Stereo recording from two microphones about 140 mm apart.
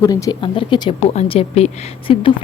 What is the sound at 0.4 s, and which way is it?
A woman's voice, 40° left (ahead or behind).